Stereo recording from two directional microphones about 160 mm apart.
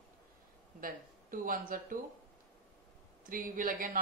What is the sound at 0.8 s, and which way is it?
Speech, 60° right (ahead or behind).